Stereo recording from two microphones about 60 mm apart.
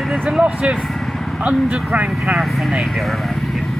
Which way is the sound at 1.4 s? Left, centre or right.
Right.